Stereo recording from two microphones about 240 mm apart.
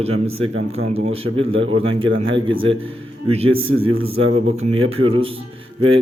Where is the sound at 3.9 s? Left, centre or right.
Right.